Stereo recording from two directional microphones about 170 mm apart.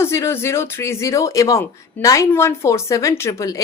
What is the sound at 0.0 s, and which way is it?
Speech, 15° left (ahead or behind).